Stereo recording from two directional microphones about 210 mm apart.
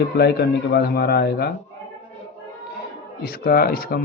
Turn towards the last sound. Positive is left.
turn(degrees=45)  # may be behind; listen again after turning